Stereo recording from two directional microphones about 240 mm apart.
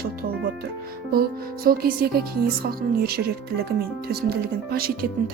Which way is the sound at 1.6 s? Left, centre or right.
Right.